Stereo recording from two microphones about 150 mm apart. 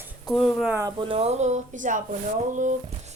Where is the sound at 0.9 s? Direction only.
35° right (ahead or behind); by 2.0 s 60° right (ahead or behind).